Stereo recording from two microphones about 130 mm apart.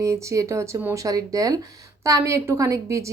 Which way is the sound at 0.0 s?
25° right (ahead or behind).